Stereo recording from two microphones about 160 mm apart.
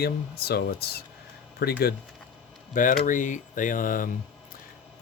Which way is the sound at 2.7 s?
55° left (ahead or behind).